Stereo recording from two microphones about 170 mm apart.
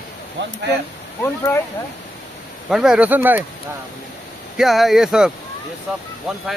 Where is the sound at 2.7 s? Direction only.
5° right (ahead or behind).